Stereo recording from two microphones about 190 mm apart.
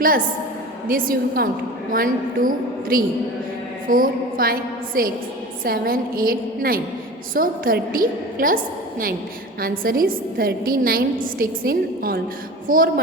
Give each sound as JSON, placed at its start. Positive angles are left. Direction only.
{"t": 0.9, "sound": "a woman's voice", "side_deg": -50}
{"t": 3.8, "sound": "a sound", "side_deg": -50}
{"t": 5.0, "sound": "a woman's voice", "side_deg": -50}
{"t": 9.6, "sound": "a woman's voice", "side_deg": -50}